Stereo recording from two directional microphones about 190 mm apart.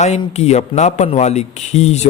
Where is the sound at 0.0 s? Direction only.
35° left (ahead or behind).